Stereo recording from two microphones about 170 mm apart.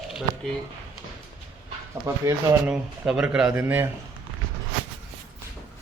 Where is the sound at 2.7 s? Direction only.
5° right (ahead or behind).